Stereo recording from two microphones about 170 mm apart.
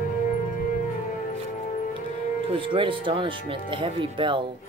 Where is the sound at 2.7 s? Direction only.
30° right (ahead or behind).